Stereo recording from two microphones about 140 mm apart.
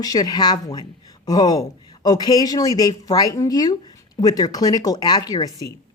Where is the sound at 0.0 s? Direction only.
25° left (ahead or behind).